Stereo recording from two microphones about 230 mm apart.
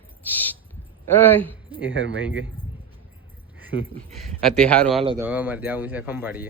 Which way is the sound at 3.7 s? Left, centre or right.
Left.